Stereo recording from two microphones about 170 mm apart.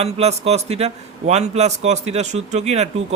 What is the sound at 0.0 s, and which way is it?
Speech, 40° right (ahead or behind).